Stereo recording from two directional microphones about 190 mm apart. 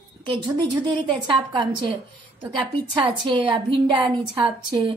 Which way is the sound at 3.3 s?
25° right (ahead or behind).